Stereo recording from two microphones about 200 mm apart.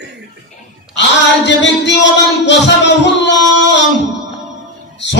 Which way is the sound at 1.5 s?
60° left (ahead or behind).